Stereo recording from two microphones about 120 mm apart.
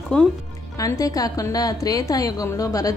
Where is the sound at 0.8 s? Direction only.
30° left (ahead or behind).